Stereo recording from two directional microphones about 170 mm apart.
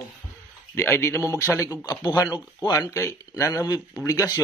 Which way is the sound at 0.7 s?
15° left (ahead or behind).